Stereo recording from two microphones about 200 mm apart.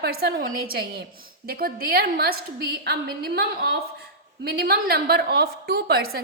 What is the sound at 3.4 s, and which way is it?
A woman's voice, 50° right (ahead or behind).